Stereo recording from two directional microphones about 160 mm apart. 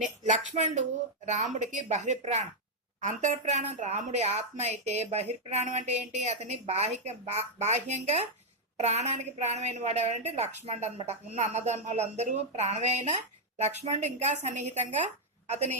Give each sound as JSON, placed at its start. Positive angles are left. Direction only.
{"t": 0.3, "sound": "speech", "side_deg": -50}